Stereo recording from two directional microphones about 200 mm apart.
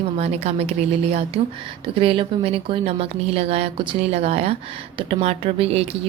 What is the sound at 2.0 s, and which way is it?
A woman's voice, 25° right (ahead or behind).